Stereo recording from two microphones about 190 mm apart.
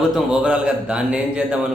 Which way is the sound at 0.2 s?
5° right (ahead or behind).